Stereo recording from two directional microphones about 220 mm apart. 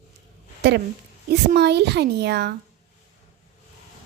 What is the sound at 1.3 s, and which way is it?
A woman's voice, 50° right (ahead or behind).